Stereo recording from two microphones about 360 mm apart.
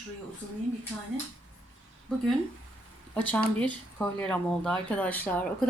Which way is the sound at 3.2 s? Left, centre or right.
Centre.